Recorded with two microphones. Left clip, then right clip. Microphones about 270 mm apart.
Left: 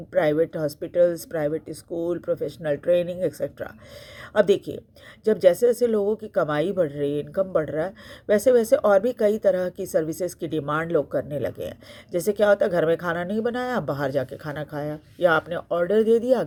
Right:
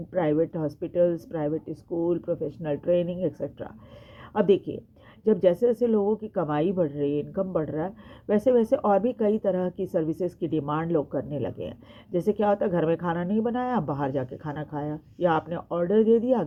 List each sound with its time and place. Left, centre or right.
0.1 s speech: left
5.3 s speech: left